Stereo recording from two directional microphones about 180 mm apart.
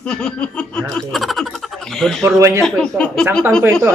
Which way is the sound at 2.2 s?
15° right (ahead or behind).